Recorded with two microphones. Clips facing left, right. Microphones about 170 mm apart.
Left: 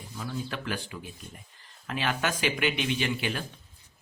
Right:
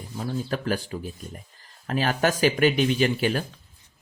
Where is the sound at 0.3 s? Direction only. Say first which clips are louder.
Right 7 dB; 40° right (ahead or behind).